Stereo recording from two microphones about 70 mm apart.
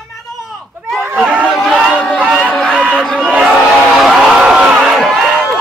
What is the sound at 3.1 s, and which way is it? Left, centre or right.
Crowd, centre.